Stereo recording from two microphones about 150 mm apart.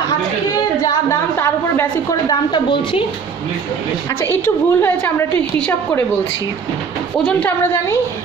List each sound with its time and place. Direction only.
2.2 s speech: 35° left (ahead or behind)
4.2 s a woman's voice: 15° left (ahead or behind)
7.2 s a woman's voice: 10° left (ahead or behind)